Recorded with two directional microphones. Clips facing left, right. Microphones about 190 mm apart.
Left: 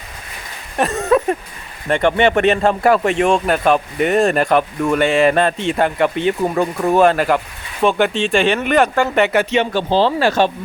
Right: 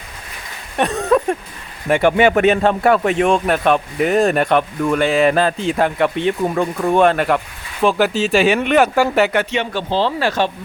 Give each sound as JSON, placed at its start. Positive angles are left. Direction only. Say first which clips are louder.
{"t": 0.8, "sound": "a sound", "louder": "even", "side_deg": 0}
{"t": 1.9, "sound": "speech", "louder": "right 1 dB", "side_deg": -5}
{"t": 9.5, "sound": "speech", "louder": "left 4 dB", "side_deg": 30}